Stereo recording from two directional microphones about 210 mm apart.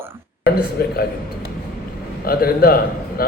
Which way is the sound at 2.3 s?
45° left (ahead or behind).